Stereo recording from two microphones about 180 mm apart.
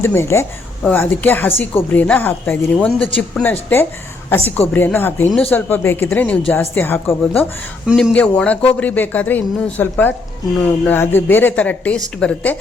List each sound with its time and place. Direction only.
0.0 s speech: 15° left (ahead or behind)
7.9 s speech: 5° right (ahead or behind)
8.1 s speech: 5° left (ahead or behind)